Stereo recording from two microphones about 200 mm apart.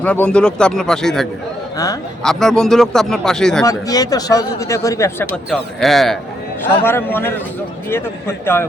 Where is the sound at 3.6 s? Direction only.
15° left (ahead or behind).